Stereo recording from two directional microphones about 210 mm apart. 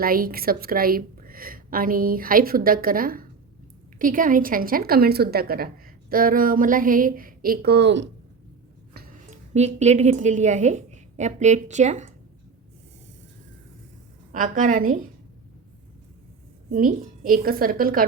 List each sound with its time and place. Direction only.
0.0 s a woman's voice: 45° right (ahead or behind)
9.5 s a woman's voice: 30° right (ahead or behind)
14.3 s a woman's voice: 40° right (ahead or behind)
16.7 s a woman's voice: 40° right (ahead or behind)